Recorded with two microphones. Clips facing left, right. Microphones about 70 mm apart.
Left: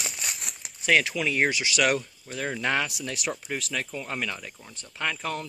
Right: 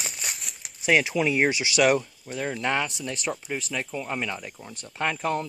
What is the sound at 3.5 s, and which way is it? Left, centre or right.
Speech, centre.